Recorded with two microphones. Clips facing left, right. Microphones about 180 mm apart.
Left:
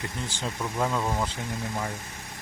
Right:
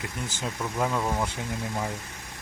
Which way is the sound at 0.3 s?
5° right (ahead or behind).